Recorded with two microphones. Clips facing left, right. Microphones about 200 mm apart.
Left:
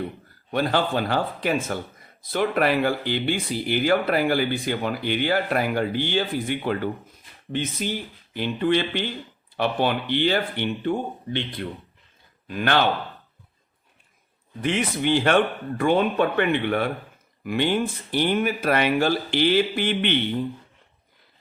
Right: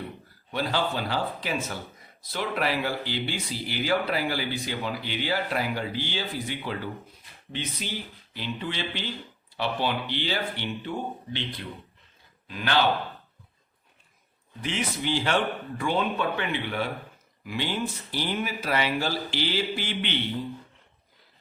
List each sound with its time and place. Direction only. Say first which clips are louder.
0.5 s speech: left 5 dB; 55° left (ahead or behind)
14.6 s speech: left 6 dB; 55° left (ahead or behind)